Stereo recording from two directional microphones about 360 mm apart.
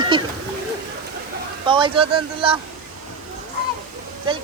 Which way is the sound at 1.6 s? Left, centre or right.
Centre.